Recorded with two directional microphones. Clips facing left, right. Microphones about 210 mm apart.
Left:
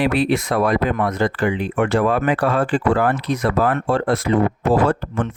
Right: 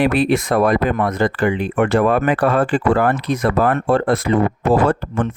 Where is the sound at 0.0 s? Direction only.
50° right (ahead or behind).